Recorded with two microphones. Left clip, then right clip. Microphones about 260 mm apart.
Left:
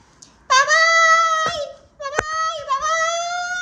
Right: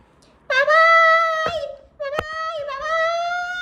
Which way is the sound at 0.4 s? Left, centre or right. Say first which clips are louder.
Even; centre.